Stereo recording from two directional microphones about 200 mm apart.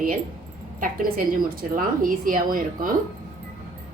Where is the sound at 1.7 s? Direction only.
45° right (ahead or behind).